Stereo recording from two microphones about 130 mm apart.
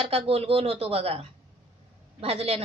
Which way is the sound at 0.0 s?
50° right (ahead or behind).